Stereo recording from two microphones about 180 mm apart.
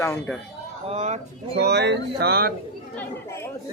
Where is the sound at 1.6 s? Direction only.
70° right (ahead or behind).